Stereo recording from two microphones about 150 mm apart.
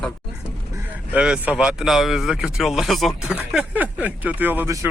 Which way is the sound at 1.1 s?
10° right (ahead or behind).